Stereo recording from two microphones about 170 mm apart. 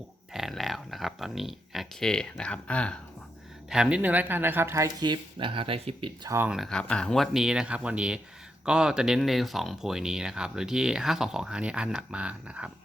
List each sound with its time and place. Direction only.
0.3 s speech: centre (ahead or behind)
3.7 s speech: 5° right (ahead or behind); by 6.1 s 35° right (ahead or behind)
6.2 s speech: 15° right (ahead or behind)
6.5 s speech: centre (ahead or behind)